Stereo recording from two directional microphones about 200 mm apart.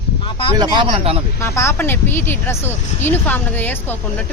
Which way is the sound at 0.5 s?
20° right (ahead or behind).